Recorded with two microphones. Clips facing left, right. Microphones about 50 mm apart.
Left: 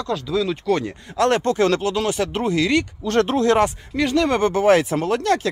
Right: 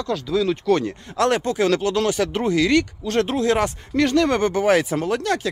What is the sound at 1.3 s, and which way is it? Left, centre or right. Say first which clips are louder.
Speech: left 2 dB; left.